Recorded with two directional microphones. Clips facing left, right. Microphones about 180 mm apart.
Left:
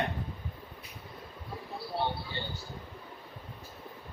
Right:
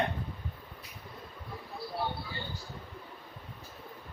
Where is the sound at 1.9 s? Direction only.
25° left (ahead or behind).